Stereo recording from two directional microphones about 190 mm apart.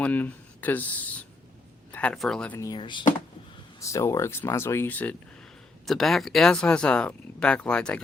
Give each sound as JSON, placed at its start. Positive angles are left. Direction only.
{"t": 0.0, "sound": "speech", "side_deg": 10}
{"t": 2.6, "sound": "speech", "side_deg": 20}